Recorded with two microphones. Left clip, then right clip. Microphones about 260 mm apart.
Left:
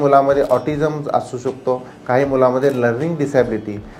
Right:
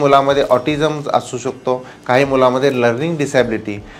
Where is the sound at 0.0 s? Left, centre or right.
Right.